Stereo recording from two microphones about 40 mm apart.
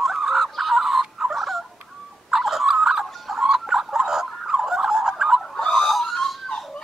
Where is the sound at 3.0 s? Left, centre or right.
Centre.